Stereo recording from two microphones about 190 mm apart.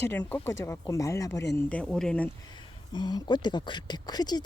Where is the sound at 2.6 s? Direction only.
25° left (ahead or behind).